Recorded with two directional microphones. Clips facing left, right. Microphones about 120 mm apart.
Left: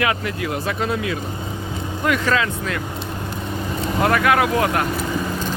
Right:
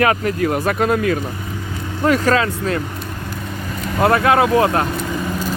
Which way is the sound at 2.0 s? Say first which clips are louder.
Right 5 dB; 40° right (ahead or behind).